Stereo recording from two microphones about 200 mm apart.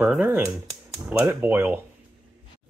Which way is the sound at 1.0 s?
10° right (ahead or behind).